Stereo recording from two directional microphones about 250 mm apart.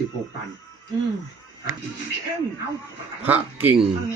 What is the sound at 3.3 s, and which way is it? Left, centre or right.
Speech, centre.